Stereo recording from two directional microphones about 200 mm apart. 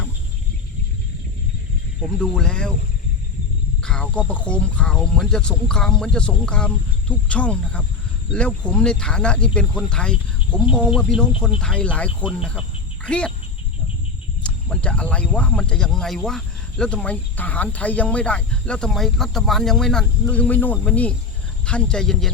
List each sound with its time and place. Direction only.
2.0 s speech: 5° left (ahead or behind)
3.8 s speech: 5° left (ahead or behind)
13.1 s speech: 5° left (ahead or behind)
14.4 s speech: 5° left (ahead or behind)